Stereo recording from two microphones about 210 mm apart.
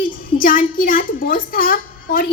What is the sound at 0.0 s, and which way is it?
A woman's voice, 40° left (ahead or behind).